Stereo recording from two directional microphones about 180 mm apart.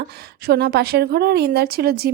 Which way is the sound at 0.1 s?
60° right (ahead or behind).